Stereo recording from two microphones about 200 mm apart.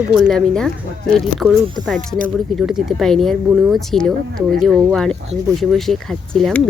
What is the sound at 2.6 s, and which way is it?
Speech, centre (ahead or behind).